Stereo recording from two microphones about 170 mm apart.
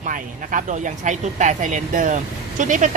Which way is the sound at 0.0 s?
50° right (ahead or behind).